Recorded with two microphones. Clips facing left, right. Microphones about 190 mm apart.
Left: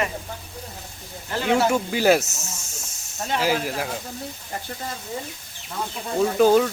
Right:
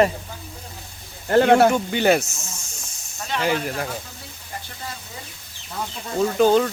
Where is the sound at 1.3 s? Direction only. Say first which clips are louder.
Right 7 dB; 55° right (ahead or behind).